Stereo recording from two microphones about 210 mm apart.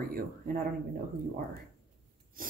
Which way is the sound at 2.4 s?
40° right (ahead or behind).